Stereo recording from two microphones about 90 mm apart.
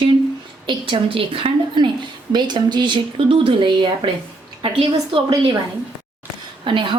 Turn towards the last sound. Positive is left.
turn(degrees=-65)  # may be behind; listen again after turning